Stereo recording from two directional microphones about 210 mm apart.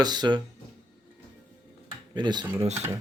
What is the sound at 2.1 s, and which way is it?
Speech, 20° right (ahead or behind).